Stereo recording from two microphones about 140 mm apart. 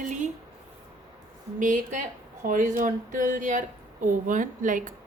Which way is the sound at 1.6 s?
65° right (ahead or behind).